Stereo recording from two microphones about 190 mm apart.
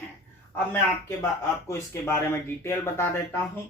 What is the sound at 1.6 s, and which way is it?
Speech, 15° left (ahead or behind).